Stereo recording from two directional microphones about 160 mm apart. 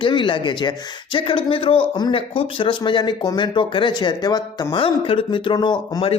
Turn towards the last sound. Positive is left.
turn(degrees=30)  # may be behind; listen again after turning